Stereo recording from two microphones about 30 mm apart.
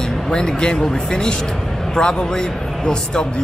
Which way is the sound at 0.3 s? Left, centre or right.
Left.